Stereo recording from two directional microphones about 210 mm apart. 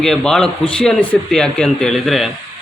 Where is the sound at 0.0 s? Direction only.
5° left (ahead or behind).